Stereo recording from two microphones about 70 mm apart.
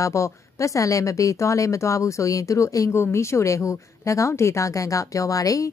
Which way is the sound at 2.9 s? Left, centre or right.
Left.